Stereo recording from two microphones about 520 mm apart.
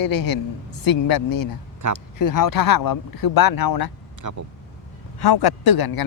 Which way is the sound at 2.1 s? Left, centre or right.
Left.